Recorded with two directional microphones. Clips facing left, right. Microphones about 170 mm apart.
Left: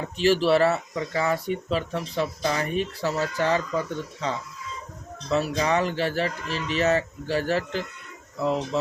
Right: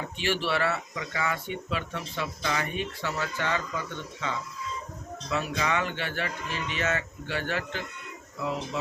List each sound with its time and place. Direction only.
0.2 s speech: 35° left (ahead or behind)